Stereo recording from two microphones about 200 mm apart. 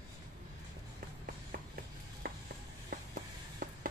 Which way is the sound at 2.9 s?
45° right (ahead or behind).